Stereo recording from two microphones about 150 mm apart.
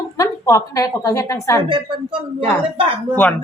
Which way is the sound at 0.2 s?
20° left (ahead or behind).